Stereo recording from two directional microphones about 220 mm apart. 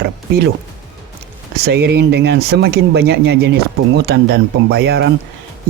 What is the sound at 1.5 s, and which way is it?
Speech, 45° right (ahead or behind).